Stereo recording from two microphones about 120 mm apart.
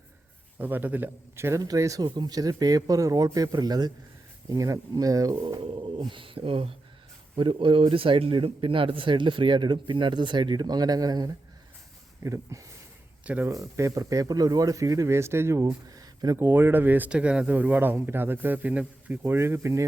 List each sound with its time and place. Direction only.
0.6 s speech: 15° right (ahead or behind)
5.6 s a man's voice: 45° right (ahead or behind); by 12.6 s 25° right (ahead or behind)
13.2 s speech: 10° right (ahead or behind)
13.5 s speech: 25° right (ahead or behind)
16.4 s speech: 15° right (ahead or behind)